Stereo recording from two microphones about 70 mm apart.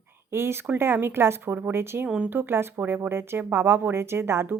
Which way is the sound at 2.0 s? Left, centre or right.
Centre.